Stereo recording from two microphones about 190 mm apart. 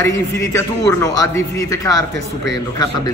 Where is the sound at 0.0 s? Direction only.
15° left (ahead or behind).